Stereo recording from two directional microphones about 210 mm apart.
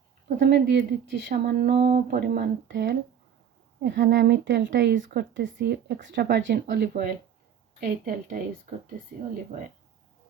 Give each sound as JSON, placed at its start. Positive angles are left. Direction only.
{"t": 0.3, "sound": "speech", "side_deg": -40}
{"t": 0.5, "sound": "speech", "side_deg": -55}